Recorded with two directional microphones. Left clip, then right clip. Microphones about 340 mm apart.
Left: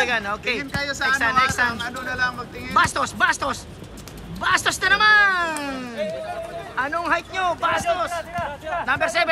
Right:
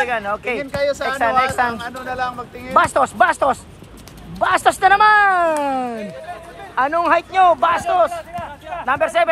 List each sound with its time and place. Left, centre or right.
0.0 s speech: centre
8.1 s a sound: left
8.8 s speech: centre